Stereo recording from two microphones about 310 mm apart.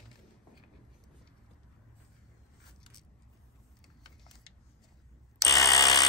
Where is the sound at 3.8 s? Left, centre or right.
Centre.